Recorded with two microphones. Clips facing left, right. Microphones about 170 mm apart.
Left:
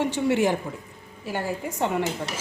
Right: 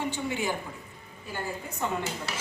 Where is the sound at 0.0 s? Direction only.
80° left.